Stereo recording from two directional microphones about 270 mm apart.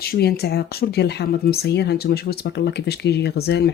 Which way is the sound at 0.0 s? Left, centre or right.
Left.